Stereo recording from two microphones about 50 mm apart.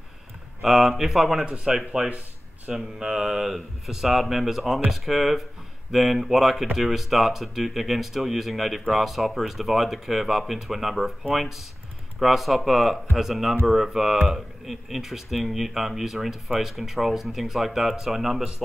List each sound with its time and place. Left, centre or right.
0.6 s speech: centre
1.4 s speech: centre
2.0 s a sound: right
2.7 s speech: centre